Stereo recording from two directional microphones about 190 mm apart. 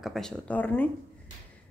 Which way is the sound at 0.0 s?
Centre (ahead or behind).